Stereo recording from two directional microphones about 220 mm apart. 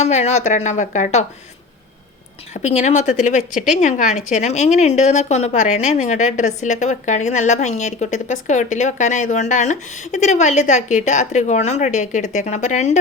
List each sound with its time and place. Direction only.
0.0 s a woman's voice: 30° left (ahead or behind)
2.5 s a woman's voice: 30° left (ahead or behind)